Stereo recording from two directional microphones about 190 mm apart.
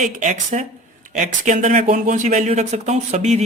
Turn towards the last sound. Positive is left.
turn(degrees=-35)  # may be behind; listen again after turning